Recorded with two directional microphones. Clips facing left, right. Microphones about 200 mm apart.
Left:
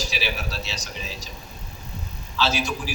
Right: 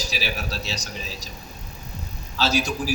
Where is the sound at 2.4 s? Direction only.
40° right (ahead or behind).